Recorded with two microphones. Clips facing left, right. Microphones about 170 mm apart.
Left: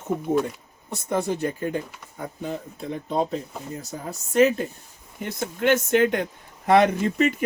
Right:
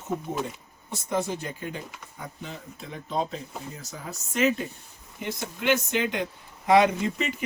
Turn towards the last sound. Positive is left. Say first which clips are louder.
# left 4 dB
turn(degrees=55)  # may be behind; listen again after turning